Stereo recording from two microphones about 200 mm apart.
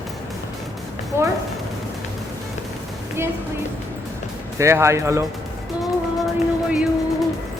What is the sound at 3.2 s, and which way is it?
Music, 15° right (ahead or behind).